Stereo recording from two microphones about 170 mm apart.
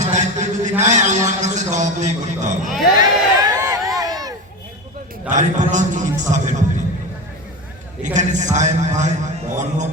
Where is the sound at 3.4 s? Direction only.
20° right (ahead or behind).